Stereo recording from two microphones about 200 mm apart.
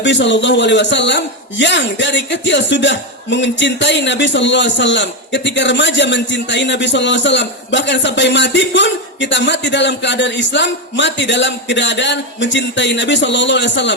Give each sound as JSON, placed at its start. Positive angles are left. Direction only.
{"t": 0.0, "sound": "a man's voice", "side_deg": 65}